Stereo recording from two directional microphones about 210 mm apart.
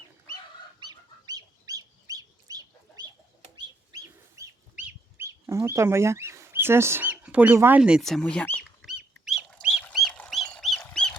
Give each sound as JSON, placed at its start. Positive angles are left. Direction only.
{"t": 0.8, "sound": "chicken", "side_deg": -20}